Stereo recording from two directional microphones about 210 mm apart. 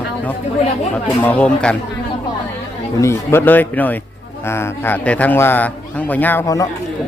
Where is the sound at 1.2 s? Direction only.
5° left (ahead or behind).